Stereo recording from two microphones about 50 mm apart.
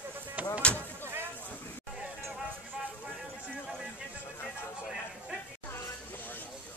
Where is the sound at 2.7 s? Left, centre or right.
Centre.